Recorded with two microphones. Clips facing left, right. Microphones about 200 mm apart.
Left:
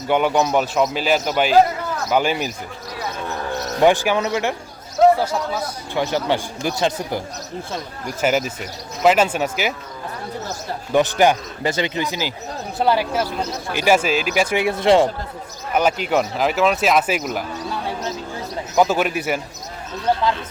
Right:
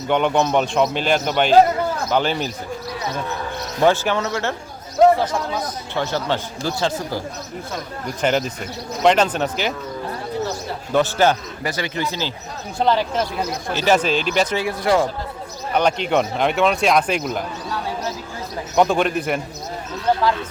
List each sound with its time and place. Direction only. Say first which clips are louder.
0.1 s a man's voice: even; 5° left (ahead or behind)
3.8 s a man's voice: left 1 dB; 15° left (ahead or behind)
5.9 s a man's voice: left 2 dB; 15° left (ahead or behind)
8.2 s a man's voice: left 1 dB; 5° left (ahead or behind)
10.9 s a man's voice: left 1 dB; 15° left (ahead or behind)
14.5 s speech: left 3 dB; 20° left (ahead or behind)
15.7 s speech: even; 5° left (ahead or behind)
18.8 s speech: right 1 dB; 5° left (ahead or behind)